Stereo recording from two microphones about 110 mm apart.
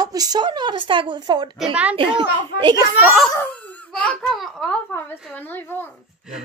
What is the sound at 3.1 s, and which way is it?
Speech, centre (ahead or behind).